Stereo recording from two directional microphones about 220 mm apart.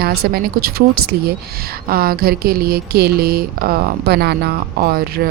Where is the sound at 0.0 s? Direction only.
45° right (ahead or behind).